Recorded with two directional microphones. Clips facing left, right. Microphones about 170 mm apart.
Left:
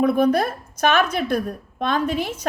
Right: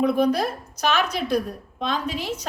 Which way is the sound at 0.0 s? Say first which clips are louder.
Left 2 dB; 50° left (ahead or behind).